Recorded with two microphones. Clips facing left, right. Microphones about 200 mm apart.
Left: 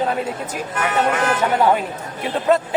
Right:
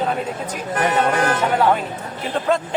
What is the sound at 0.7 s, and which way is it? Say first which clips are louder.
Speech: right 2 dB; 35° right (ahead or behind).